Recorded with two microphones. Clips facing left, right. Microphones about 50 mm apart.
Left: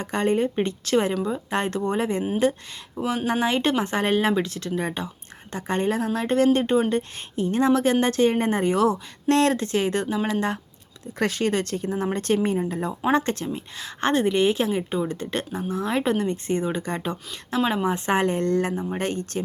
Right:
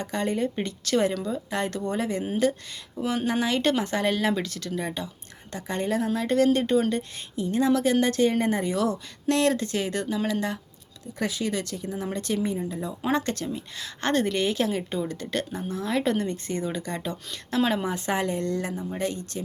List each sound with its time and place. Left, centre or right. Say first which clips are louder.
0.0 s speech: left 4 dB; left
1.5 s speech: left 3 dB; left
3.0 s speech: left 2 dB; centre
3.2 s speech: left 2 dB; left
7.3 s speech: left 3 dB; left
11.2 s speech: left 5 dB; left
13.1 s speech: left 4 dB; left
17.5 s speech: left 1 dB; centre
17.8 s speech: left 5 dB; left